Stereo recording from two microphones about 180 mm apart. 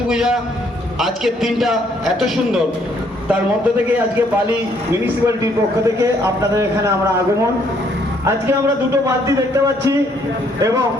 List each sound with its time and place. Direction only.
0.1 s a man's voice: 5° right (ahead or behind)
4.9 s speech: 15° right (ahead or behind)
9.0 s speech: 20° right (ahead or behind)